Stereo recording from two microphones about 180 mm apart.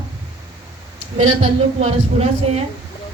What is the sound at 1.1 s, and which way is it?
Speech, 35° right (ahead or behind).